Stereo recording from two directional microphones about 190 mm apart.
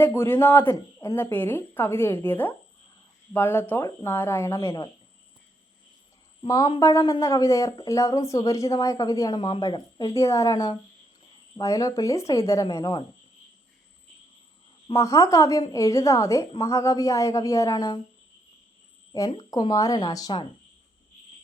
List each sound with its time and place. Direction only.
0.0 s speech: 10° left (ahead or behind)
6.4 s speech: 25° left (ahead or behind)
14.8 s speech: 15° left (ahead or behind)
19.5 s speech: 20° left (ahead or behind)